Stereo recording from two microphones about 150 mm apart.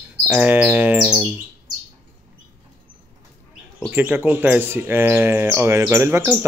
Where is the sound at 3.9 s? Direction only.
10° right (ahead or behind).